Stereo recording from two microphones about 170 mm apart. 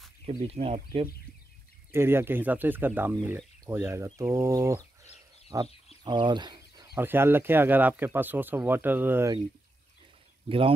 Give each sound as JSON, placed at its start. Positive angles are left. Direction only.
{"t": 0.2, "sound": "speech", "side_deg": -35}
{"t": 1.9, "sound": "speech", "side_deg": -15}
{"t": 6.0, "sound": "a sound", "side_deg": -25}
{"t": 7.0, "sound": "speech", "side_deg": -15}